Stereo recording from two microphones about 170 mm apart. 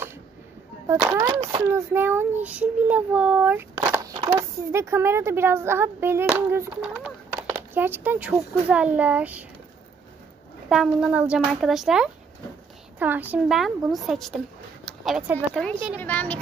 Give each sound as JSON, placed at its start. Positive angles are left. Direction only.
{"t": 0.8, "sound": "a child's voice", "side_deg": -20}
{"t": 10.7, "sound": "speech", "side_deg": -5}
{"t": 14.9, "sound": "a sound", "side_deg": 0}
{"t": 15.5, "sound": "speech", "side_deg": 5}